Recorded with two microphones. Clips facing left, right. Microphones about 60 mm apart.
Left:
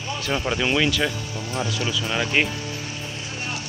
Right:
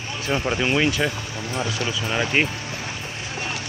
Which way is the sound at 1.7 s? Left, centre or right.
Right.